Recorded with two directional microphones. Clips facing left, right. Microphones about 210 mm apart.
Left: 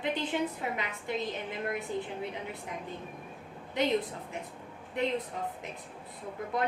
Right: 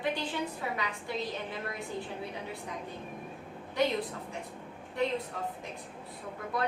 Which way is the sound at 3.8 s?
20° left (ahead or behind).